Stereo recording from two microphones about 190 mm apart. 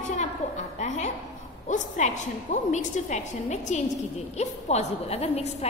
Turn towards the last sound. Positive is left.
turn(degrees=35)  # may be behind; listen again after turning